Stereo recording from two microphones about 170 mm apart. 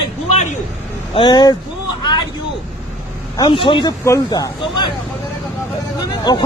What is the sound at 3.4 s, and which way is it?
Speech, 30° left (ahead or behind).